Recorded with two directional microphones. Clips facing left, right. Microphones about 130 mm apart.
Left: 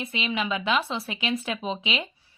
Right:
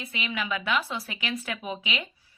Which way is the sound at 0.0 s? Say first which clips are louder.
Left 4 dB; 25° left (ahead or behind).